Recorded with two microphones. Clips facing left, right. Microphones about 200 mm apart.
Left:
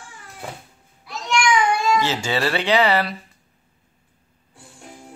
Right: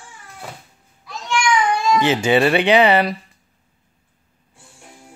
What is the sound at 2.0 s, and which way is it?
Speech, 15° right (ahead or behind).